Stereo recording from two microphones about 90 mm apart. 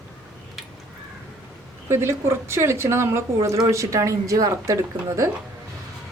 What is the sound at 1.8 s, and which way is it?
A woman's voice, 30° right (ahead or behind).